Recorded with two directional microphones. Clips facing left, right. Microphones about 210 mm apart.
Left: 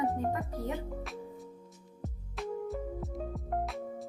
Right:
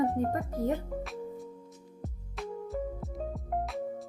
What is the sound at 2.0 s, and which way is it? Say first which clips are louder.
Music: left 1 dB; centre (ahead or behind).